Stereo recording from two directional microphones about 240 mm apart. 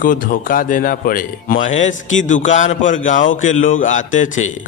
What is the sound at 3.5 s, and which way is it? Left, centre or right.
Speech, left.